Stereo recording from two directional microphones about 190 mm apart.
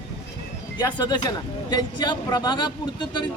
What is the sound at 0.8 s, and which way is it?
Speech, 20° left (ahead or behind).